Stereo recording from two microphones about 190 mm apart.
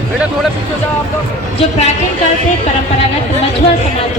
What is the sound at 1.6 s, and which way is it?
Speech, 35° left (ahead or behind).